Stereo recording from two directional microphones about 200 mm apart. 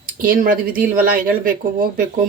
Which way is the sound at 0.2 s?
45° right (ahead or behind).